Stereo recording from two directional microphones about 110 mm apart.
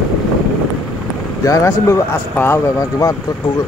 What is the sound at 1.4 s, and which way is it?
Speech, 30° left (ahead or behind).